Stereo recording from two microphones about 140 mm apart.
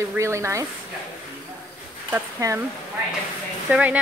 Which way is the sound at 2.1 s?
20° right (ahead or behind).